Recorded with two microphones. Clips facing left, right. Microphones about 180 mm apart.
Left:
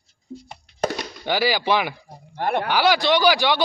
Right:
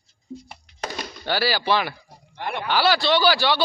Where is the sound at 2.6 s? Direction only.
15° left (ahead or behind).